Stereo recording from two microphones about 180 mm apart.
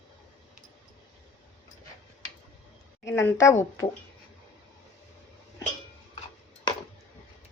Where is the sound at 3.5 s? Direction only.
15° left (ahead or behind).